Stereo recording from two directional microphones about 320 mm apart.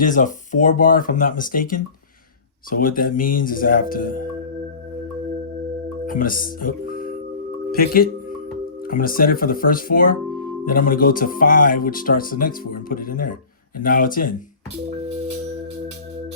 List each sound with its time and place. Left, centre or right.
0.0 s speech: left
6.1 s speech: left